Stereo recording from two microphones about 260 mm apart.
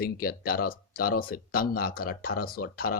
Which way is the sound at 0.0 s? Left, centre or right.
Left.